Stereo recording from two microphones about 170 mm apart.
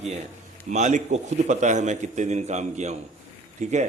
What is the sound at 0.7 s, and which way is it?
A man's voice, 45° right (ahead or behind).